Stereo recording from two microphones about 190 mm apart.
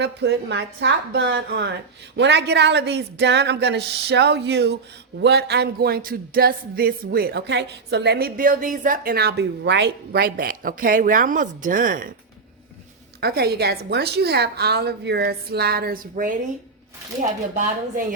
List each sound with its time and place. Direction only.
0.0 s a woman's voice: 65° right (ahead or behind); by 12.1 s 45° right (ahead or behind)
13.1 s a woman's voice: 55° right (ahead or behind)